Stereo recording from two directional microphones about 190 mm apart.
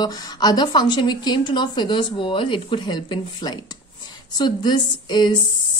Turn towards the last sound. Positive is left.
turn(degrees=25)  # may be behind; listen again after turning